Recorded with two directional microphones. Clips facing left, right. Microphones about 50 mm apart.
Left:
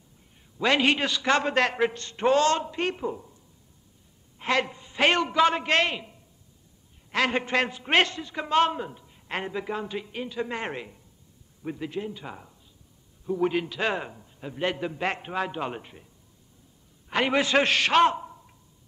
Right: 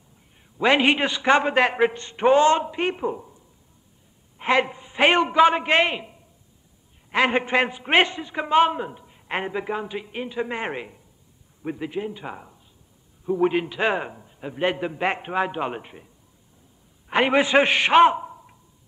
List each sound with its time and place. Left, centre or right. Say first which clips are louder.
0.6 s a man's voice: right 4 dB; centre
17.1 s a man's voice: right 5 dB; right